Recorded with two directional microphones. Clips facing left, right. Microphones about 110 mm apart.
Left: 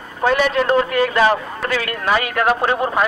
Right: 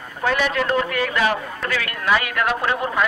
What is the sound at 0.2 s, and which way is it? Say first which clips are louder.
A man's voice: left 4 dB; 30° left (ahead or behind).